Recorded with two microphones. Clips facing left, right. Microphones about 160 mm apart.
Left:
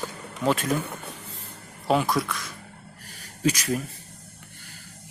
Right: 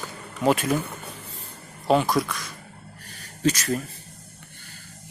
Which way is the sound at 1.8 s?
Centre (ahead or behind).